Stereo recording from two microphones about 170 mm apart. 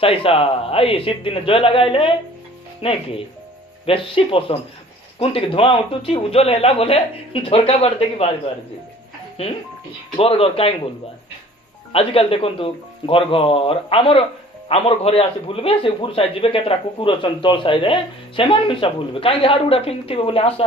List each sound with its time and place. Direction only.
0.0 s a man's voice: 30° left (ahead or behind)
10.2 s a man's voice: 35° left (ahead or behind)
11.9 s a man's voice: 35° left (ahead or behind)